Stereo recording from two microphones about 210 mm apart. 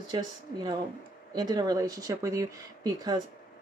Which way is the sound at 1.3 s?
20° right (ahead or behind).